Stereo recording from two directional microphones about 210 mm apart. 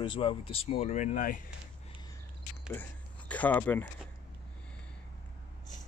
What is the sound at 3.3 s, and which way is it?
Speech, 10° left (ahead or behind).